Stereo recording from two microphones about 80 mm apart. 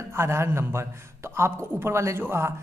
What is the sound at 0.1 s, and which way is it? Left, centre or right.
Speech, right.